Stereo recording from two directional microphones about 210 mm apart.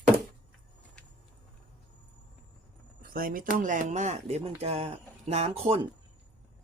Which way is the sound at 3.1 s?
45° right (ahead or behind).